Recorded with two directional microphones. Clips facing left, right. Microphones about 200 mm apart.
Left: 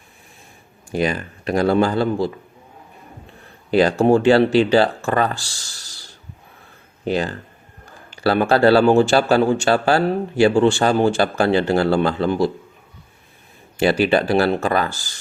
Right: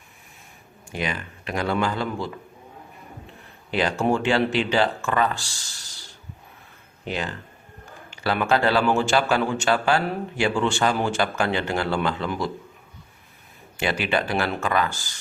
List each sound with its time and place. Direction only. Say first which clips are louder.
0.9 s speech: left 8 dB; 40° left (ahead or behind)
3.7 s speech: left 8 dB; 35° left (ahead or behind)
7.0 s speech: left 8 dB; 40° left (ahead or behind)
13.7 s speech: left 8 dB; 35° left (ahead or behind)